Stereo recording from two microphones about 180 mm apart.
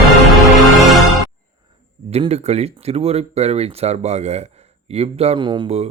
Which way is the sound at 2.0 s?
35° right (ahead or behind).